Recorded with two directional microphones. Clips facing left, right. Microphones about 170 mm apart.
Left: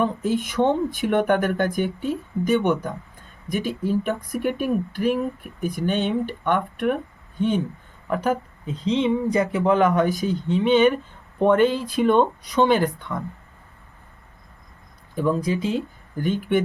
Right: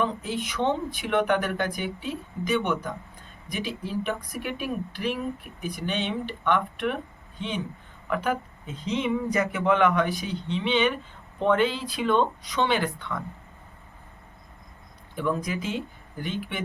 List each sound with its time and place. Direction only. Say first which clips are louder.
0.0 s speech: left 5 dB; 50° left (ahead or behind)
15.1 s speech: left 5 dB; 35° left (ahead or behind)